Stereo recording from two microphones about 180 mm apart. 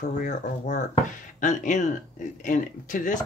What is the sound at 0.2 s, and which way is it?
Speech, 40° left (ahead or behind).